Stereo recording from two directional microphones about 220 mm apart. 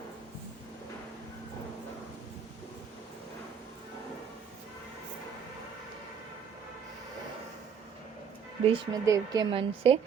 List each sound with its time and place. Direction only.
8.6 s speech: 20° right (ahead or behind)